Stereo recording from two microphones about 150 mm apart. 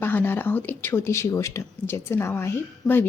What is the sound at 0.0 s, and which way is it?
A woman's voice, 15° left (ahead or behind).